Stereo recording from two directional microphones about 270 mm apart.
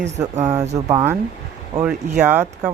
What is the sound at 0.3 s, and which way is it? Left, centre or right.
Speech, right.